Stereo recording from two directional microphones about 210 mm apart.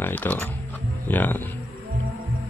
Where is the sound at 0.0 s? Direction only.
10° left (ahead or behind).